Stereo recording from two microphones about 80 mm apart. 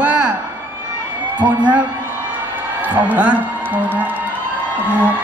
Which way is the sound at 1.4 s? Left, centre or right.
Centre.